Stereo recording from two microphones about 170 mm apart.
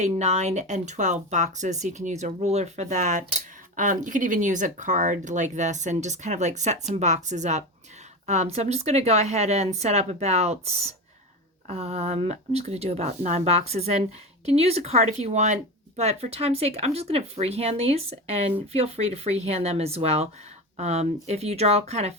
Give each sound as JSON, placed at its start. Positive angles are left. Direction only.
{"t": 0.0, "sound": "speech", "side_deg": -40}